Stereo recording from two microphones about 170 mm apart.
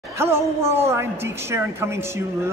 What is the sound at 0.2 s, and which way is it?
A man's voice, 15° right (ahead or behind).